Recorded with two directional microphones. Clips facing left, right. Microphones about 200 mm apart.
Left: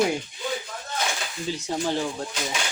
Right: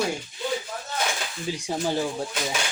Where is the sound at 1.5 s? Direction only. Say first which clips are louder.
Even; 15° right (ahead or behind).